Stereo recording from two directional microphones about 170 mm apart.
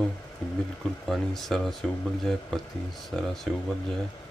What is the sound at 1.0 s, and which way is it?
Speech, centre (ahead or behind).